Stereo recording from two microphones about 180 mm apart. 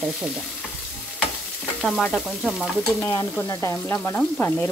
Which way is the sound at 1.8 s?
Centre (ahead or behind).